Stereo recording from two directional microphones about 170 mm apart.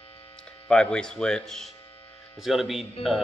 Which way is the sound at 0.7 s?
5° left (ahead or behind).